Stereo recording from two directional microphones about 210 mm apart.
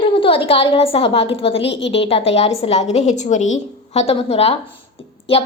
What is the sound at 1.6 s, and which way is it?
Speech, 60° left (ahead or behind).